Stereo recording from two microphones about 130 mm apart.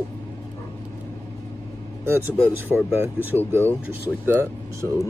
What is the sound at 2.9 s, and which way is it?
Speech, 15° right (ahead or behind).